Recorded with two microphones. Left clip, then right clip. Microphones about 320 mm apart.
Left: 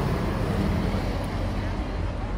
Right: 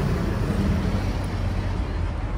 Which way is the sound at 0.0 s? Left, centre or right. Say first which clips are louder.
Even; left.